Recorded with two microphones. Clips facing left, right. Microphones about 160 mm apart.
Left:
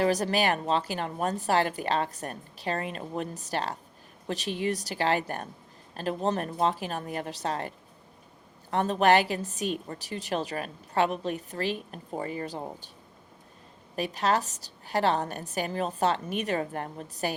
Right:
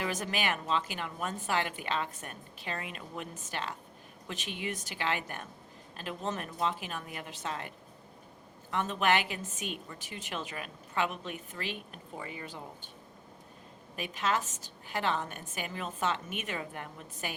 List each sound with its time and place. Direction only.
0.0 s a woman's voice: 35° left (ahead or behind)
8.7 s a woman's voice: 35° left (ahead or behind)
13.9 s a woman's voice: 35° left (ahead or behind)